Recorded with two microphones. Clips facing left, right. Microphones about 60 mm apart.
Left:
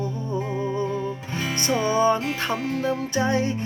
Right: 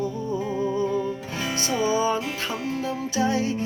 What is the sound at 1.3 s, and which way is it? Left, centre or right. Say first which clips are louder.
Music: left 1 dB; centre.